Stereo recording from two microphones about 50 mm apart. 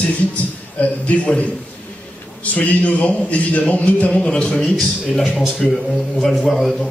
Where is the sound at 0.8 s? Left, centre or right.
Left.